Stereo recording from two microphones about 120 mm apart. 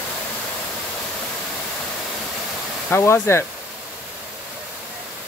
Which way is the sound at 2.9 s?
20° left (ahead or behind).